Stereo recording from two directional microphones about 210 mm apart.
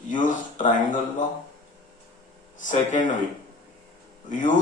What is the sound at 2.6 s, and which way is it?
Speech, 35° left (ahead or behind).